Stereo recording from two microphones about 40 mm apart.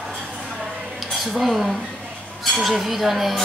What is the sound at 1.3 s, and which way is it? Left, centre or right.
A woman's voice, centre.